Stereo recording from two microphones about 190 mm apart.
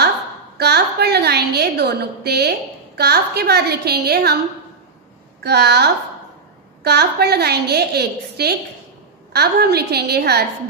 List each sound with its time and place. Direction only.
0.6 s a woman's voice: 60° right (ahead or behind)
5.4 s a woman's voice: 60° right (ahead or behind)